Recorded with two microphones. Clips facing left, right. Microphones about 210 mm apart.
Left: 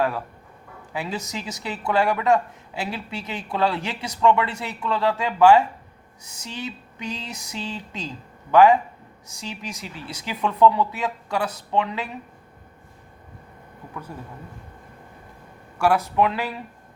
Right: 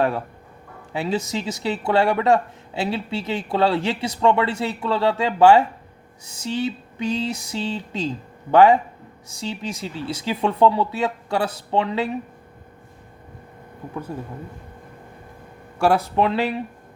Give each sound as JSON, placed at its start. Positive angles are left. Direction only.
{"t": 0.9, "sound": "speech", "side_deg": -25}
{"t": 14.1, "sound": "speech", "side_deg": -25}
{"t": 15.8, "sound": "speech", "side_deg": -30}